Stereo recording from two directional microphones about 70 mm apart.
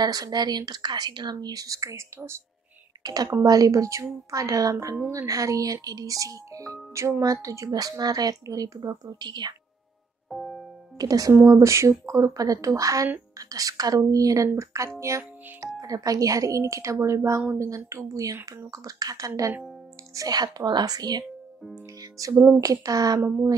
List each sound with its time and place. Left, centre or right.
0.0 s speech: right
3.0 s a woman's voice: right
10.3 s music: centre
11.0 s speech: right
11.4 s speech: right
15.8 s speech: right
20.2 s a woman's voice: right
22.4 s speech: right